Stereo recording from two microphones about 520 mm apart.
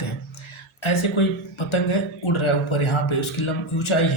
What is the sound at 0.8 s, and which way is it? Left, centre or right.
Speech, left.